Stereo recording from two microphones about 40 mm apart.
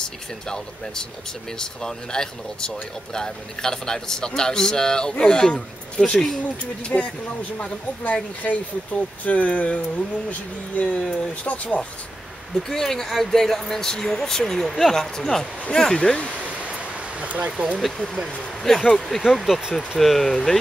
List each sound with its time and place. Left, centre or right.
0.0 s speech: centre
6.9 s speech: left
8.0 s speech: left
12.5 s speech: centre
16.3 s a sound: right
17.5 s speech: right
17.7 s speech: centre